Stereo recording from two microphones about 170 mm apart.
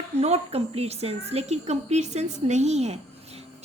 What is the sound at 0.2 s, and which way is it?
A woman's voice, 35° right (ahead or behind).